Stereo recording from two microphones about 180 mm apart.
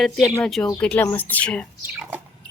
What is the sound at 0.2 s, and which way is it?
Speech, 15° left (ahead or behind).